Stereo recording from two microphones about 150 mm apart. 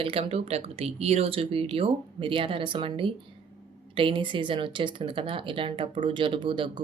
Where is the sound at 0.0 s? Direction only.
40° right (ahead or behind).